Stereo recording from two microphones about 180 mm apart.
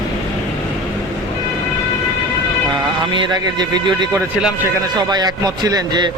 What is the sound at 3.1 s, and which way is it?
Speech, 25° right (ahead or behind).